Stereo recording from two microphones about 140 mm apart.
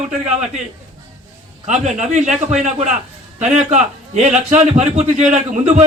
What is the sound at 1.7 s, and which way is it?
Speech, 55° right (ahead or behind).